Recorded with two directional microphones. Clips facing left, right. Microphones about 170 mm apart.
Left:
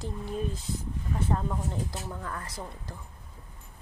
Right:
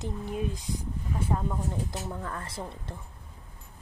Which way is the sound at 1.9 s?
25° right (ahead or behind).